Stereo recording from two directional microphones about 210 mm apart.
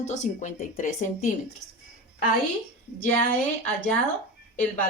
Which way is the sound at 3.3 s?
10° left (ahead or behind).